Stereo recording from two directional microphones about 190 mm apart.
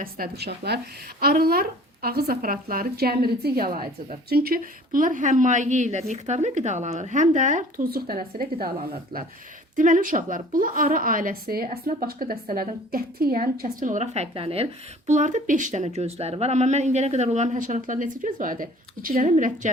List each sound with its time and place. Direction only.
0.0 s a woman's voice: 55° right (ahead or behind)
9.7 s a woman's voice: 45° right (ahead or behind)